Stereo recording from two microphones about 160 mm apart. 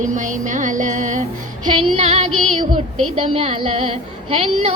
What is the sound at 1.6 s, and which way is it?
Female singing, 30° right (ahead or behind).